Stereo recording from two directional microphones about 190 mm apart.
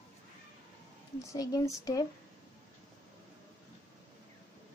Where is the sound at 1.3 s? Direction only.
20° left (ahead or behind).